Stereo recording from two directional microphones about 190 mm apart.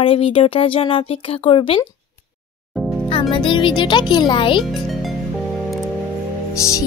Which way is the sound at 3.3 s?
25° left (ahead or behind).